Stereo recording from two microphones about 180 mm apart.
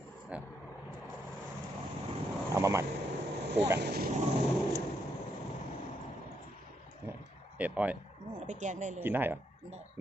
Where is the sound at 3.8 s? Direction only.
60° right (ahead or behind).